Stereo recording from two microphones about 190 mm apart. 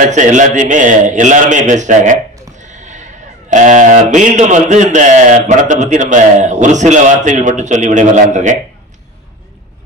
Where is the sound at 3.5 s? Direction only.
40° right (ahead or behind).